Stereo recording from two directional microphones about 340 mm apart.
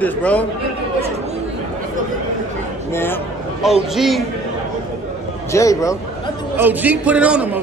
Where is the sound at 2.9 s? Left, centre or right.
Centre.